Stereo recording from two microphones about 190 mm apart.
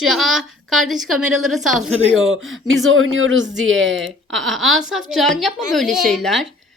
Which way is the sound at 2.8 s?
90° right.